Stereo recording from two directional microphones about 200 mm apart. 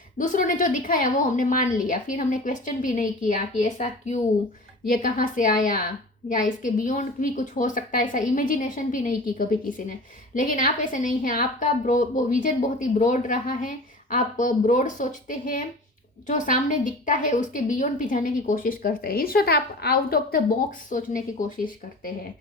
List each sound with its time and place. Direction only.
0.2 s a woman's voice: 40° left (ahead or behind)